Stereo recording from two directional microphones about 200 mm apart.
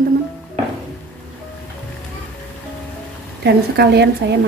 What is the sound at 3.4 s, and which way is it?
A woman's voice, 60° right (ahead or behind).